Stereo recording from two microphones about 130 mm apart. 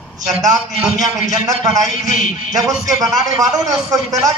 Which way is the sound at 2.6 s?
Centre (ahead or behind).